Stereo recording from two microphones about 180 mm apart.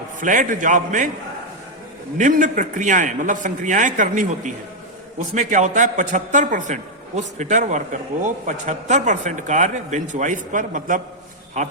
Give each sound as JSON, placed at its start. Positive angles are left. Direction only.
{"t": 0.2, "sound": "a man's voice", "side_deg": -45}
{"t": 2.1, "sound": "a man's voice", "side_deg": -45}